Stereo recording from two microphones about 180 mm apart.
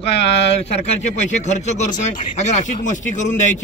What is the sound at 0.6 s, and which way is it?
Speech, 40° left (ahead or behind).